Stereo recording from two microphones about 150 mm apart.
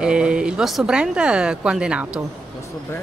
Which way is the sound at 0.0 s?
5° right (ahead or behind).